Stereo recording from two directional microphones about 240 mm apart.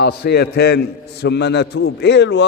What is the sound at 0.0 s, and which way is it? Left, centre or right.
A man's voice, left.